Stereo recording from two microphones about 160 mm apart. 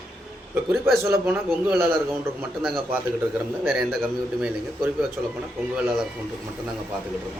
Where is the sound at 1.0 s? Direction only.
15° right (ahead or behind).